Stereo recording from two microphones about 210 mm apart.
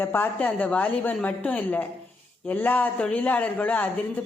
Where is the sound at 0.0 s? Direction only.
10° left (ahead or behind).